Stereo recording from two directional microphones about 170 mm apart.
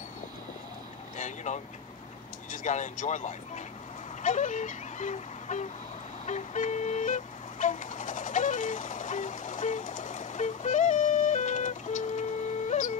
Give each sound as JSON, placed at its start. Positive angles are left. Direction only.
{"t": 1.1, "sound": "vehicle", "side_deg": 45}
{"t": 2.5, "sound": "speech", "side_deg": 45}
{"t": 4.2, "sound": "a sound", "side_deg": 45}
{"t": 6.2, "sound": "vehicle", "side_deg": 45}